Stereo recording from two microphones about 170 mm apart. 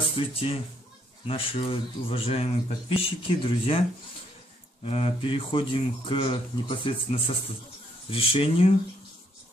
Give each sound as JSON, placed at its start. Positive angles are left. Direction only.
{"t": 0.2, "sound": "speech", "side_deg": 35}
{"t": 4.8, "sound": "speech", "side_deg": 35}